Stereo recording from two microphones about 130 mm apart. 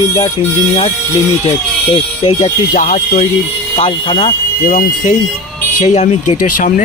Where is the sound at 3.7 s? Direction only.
45° left (ahead or behind).